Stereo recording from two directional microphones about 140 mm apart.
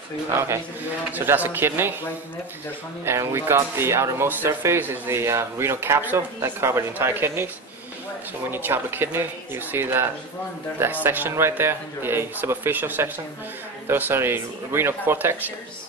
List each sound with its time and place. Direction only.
0.3 s speech: 20° right (ahead or behind)
3.1 s speech: 20° right (ahead or behind)
8.5 s speech: 15° right (ahead or behind)